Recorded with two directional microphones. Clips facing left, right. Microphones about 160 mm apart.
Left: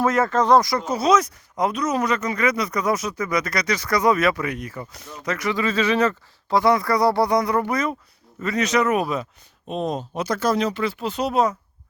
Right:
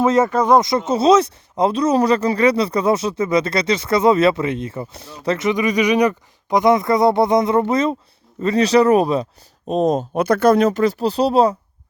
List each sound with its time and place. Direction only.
0.0 s speech: 20° right (ahead or behind)
0.6 s speech: 20° right (ahead or behind)